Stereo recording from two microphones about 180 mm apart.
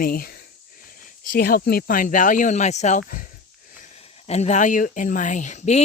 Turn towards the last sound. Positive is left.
turn(degrees=40)  # may be behind; listen again after turning